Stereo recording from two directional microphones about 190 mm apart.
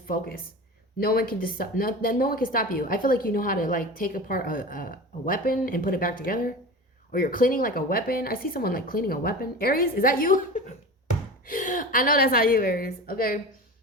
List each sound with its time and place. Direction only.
0.1 s speech: 50° left (ahead or behind)